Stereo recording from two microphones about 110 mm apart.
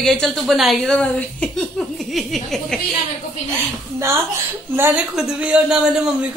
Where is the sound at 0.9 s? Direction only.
10° left (ahead or behind).